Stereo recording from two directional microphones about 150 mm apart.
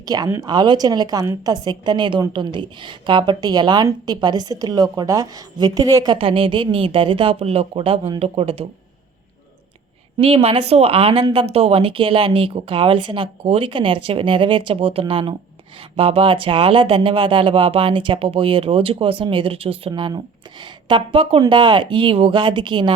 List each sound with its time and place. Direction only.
0.0 s a woman's voice: 25° right (ahead or behind)
6.1 s speech: 35° right (ahead or behind)
10.2 s speech: 40° right (ahead or behind)